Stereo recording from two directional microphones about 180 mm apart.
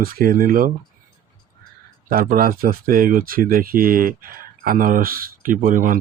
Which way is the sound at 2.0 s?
50° right (ahead or behind).